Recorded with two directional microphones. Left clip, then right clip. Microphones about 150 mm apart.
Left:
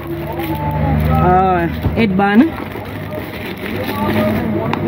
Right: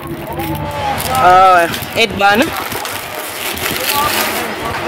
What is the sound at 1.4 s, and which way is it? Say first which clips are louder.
Speech: right 6 dB; 70° right (ahead or behind).